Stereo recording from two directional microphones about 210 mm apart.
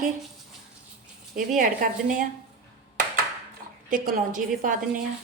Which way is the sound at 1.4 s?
40° right (ahead or behind).